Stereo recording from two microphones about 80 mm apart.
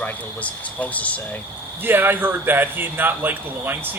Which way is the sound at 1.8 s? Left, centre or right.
Right.